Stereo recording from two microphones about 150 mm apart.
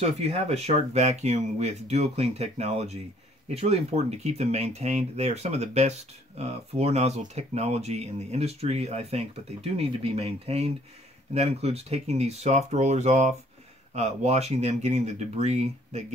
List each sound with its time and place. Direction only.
0.0 s speech: 45° right (ahead or behind)